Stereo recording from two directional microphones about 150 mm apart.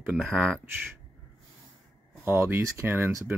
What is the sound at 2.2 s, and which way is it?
Speech, 15° right (ahead or behind).